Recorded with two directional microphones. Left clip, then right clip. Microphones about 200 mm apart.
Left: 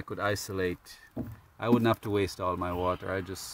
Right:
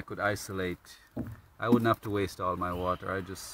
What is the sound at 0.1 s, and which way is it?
Speech, 60° left (ahead or behind).